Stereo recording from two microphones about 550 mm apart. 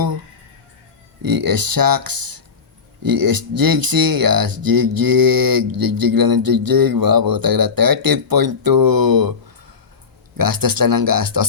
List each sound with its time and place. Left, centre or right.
1.2 s speech: right
10.3 s speech: right